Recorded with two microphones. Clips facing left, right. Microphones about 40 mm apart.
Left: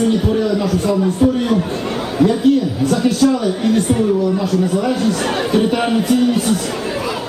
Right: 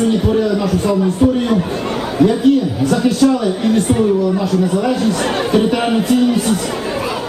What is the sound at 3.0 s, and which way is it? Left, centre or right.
Speech, centre.